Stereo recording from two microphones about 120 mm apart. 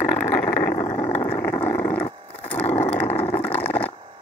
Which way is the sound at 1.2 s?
20° left (ahead or behind).